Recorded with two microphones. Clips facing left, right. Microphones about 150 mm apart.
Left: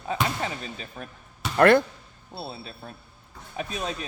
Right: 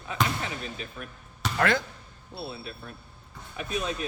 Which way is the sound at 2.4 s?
30° left (ahead or behind).